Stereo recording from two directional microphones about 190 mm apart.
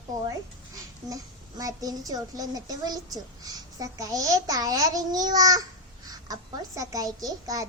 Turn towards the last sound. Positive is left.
turn(degrees=-20)  # may be behind; listen again after turning